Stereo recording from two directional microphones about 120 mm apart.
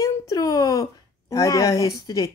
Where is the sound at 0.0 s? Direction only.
30° left (ahead or behind).